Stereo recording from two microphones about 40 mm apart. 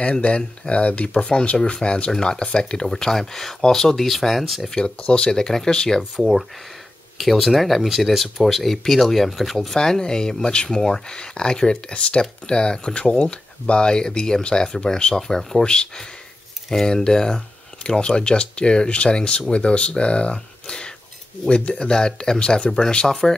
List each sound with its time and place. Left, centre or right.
0.0 s speech: left; by 4.6 s centre
4.6 s speech: centre
6.1 s speech: centre